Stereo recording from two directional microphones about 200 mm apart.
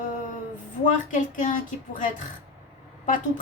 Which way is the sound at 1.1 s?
40° left (ahead or behind).